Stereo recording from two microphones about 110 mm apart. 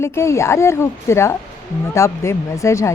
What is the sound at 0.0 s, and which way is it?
Speech, 25° left (ahead or behind).